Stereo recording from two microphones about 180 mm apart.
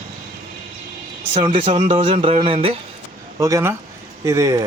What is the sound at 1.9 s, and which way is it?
Music, 25° right (ahead or behind).